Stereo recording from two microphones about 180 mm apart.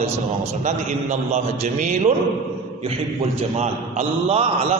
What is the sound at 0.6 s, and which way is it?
A man's voice, 40° right (ahead or behind).